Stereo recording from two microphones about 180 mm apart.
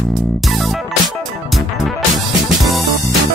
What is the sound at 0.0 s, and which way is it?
Music, centre (ahead or behind).